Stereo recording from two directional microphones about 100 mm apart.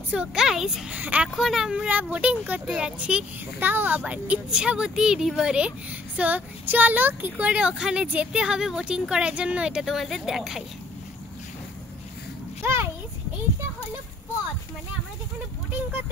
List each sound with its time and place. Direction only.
0.1 s a woman's voice: 10° right (ahead or behind)
1.3 s a woman's voice: centre (ahead or behind)
12.6 s a sound: 25° right (ahead or behind)